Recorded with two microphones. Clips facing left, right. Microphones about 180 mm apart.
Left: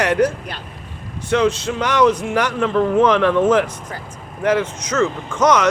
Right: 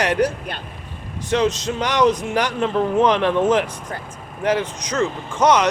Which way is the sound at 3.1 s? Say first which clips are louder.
Left 3 dB; 20° right (ahead or behind).